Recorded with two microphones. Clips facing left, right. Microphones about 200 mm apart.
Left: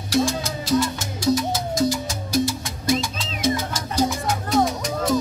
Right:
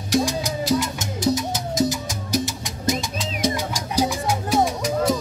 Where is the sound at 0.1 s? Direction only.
15° right (ahead or behind).